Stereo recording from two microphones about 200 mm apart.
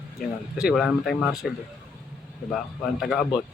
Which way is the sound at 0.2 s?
5° right (ahead or behind).